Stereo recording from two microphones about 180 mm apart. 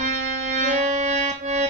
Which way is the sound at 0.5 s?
40° right (ahead or behind).